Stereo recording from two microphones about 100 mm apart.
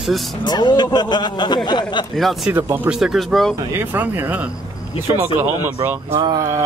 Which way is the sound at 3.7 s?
20° right (ahead or behind).